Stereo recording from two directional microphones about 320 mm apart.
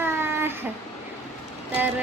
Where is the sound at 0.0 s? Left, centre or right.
Centre.